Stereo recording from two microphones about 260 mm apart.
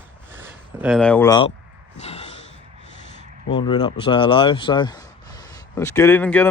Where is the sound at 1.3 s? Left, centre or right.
Centre.